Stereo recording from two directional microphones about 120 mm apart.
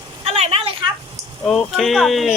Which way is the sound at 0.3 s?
60° right (ahead or behind).